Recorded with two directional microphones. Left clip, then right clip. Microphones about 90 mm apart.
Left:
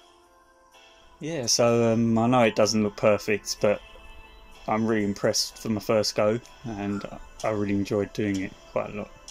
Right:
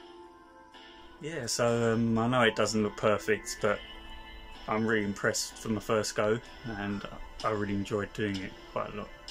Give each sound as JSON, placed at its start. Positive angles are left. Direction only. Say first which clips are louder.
{"t": 1.6, "sound": "speech", "louder": "left 5 dB", "side_deg": 25}
{"t": 6.6, "sound": "speech", "louder": "left 4 dB", "side_deg": 30}